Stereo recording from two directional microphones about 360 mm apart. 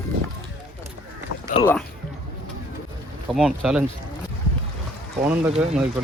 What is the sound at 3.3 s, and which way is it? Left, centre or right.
Speech, centre.